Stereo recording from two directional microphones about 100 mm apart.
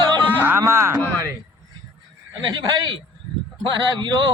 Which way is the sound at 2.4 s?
45° right (ahead or behind).